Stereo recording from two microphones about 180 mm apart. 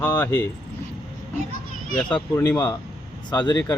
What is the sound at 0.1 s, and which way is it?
Speech, 25° left (ahead or behind).